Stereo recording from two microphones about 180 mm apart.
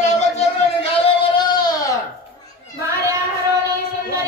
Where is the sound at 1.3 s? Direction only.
25° left (ahead or behind).